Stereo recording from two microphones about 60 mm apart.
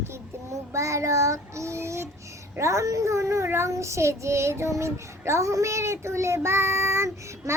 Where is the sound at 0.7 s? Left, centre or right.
Right.